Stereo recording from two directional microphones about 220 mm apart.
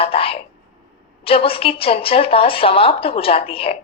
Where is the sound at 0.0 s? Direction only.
25° left (ahead or behind).